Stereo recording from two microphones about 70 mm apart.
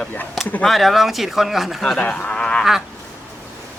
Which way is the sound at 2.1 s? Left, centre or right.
Centre.